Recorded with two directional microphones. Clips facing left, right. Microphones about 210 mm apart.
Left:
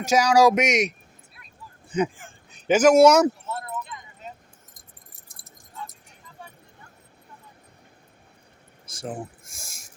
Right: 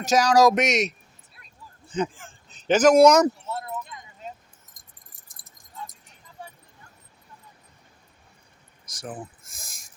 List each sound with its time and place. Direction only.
0.0 s speech: 10° left (ahead or behind)
8.9 s speech: 25° left (ahead or behind)
9.1 s speech: 10° left (ahead or behind)